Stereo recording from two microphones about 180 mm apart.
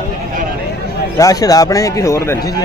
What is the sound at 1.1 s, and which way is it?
Speech, 20° left (ahead or behind).